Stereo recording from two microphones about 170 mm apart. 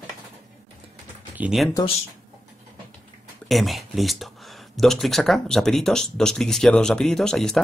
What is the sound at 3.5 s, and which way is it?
Speech, centre (ahead or behind).